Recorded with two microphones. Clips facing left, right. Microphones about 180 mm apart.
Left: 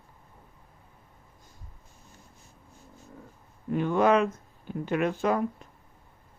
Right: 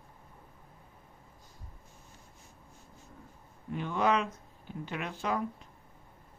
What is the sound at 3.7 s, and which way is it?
Speech, 50° left (ahead or behind).